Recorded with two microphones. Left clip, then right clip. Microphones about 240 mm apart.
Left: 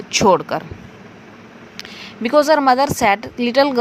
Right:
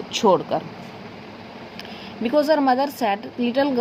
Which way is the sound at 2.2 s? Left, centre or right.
Left.